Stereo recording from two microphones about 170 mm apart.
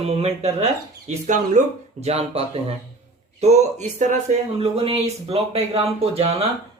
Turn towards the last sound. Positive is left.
turn(degrees=-35)  # may be behind; listen again after turning